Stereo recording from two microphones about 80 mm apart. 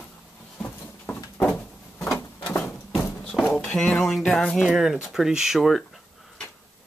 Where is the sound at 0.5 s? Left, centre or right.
Left.